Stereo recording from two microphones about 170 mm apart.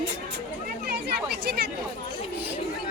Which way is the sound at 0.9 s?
70° right (ahead or behind).